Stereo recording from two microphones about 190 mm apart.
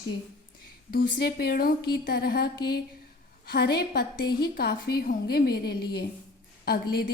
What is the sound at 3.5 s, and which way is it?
A woman's voice, 55° left (ahead or behind).